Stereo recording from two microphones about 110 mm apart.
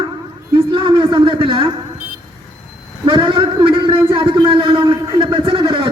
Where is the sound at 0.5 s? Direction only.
50° right (ahead or behind).